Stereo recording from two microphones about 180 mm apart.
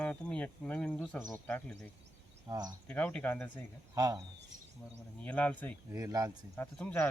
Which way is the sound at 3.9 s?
20° right (ahead or behind).